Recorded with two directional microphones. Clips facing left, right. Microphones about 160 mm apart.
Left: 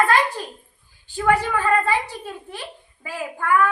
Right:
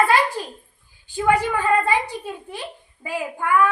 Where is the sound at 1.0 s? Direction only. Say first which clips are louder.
Right 1 dB; 15° right (ahead or behind).